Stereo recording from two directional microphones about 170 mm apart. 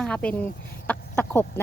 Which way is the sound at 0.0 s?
5° left (ahead or behind).